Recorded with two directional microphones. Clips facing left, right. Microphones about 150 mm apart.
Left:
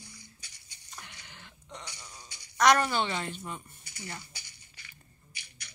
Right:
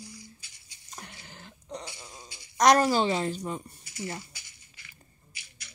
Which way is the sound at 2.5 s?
40° right (ahead or behind).